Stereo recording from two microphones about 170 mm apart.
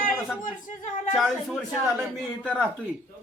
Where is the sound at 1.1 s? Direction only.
Centre (ahead or behind).